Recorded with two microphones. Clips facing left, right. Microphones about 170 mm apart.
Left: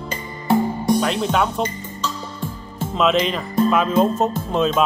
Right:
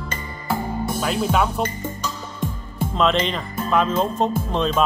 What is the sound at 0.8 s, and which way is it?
Speech, 5° right (ahead or behind).